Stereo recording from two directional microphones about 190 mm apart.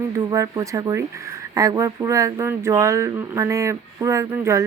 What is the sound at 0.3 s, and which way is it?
Speech, 20° right (ahead or behind).